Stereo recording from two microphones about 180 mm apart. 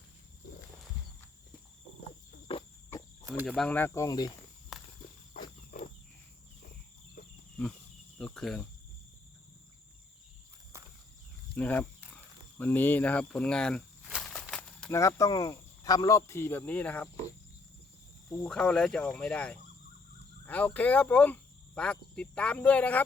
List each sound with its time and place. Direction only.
2.5 s cricket: 30° left (ahead or behind)
3.4 s speech: 5° left (ahead or behind); by 4.4 s 20° left (ahead or behind)
4.7 s walk: centre (ahead or behind)
5.3 s wild animals: 50° left (ahead or behind)
7.6 s wild animals: 5° left (ahead or behind)
8.2 s cricket: 5° left (ahead or behind)
11.5 s speech: 10° left (ahead or behind)
14.2 s a sound: 5° left (ahead or behind)
14.9 s speech: 20° left (ahead or behind)
18.4 s speech: 5° left (ahead or behind)